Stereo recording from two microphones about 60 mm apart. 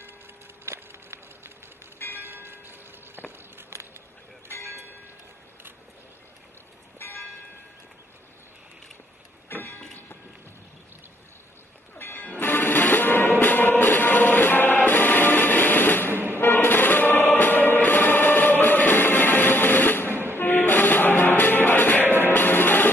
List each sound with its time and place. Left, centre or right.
0.7 s a sound: right
2.1 s church bell: right
7.0 s church bell: left
9.5 s a sound: left
12.0 s music: left
16.1 s music: right
16.3 s music: left